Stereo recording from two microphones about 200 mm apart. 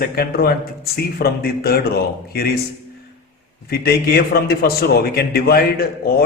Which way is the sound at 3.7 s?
50° left (ahead or behind).